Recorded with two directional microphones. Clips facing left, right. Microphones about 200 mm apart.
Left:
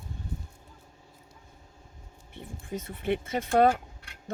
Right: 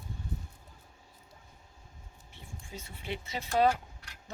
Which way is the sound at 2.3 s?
55° left (ahead or behind).